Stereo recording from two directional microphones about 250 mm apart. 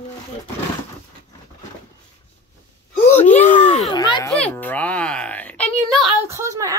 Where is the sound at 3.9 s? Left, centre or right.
Centre.